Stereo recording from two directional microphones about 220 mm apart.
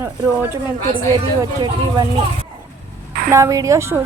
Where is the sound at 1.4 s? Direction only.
20° right (ahead or behind).